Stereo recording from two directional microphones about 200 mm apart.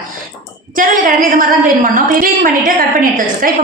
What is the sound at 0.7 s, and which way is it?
A woman's voice, 45° right (ahead or behind).